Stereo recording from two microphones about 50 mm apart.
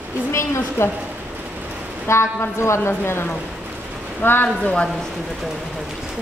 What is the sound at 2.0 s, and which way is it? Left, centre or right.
Speech, left.